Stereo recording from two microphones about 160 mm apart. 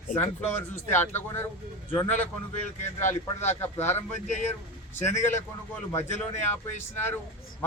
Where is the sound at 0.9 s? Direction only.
15° left (ahead or behind).